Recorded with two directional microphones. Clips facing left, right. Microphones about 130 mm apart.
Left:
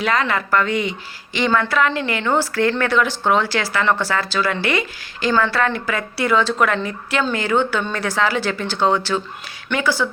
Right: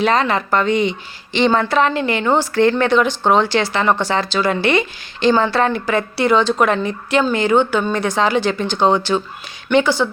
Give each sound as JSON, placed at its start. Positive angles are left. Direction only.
{"t": 0.0, "sound": "a woman's voice", "side_deg": -25}